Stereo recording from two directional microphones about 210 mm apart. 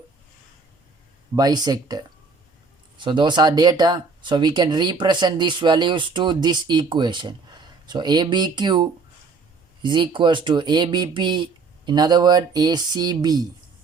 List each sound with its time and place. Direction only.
1.4 s speech: 20° right (ahead or behind)